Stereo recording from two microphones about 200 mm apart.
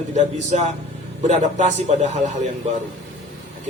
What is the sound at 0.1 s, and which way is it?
Speech, 35° right (ahead or behind).